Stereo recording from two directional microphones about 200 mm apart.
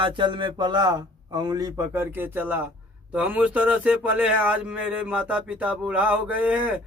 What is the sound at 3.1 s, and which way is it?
Speech, 5° right (ahead or behind).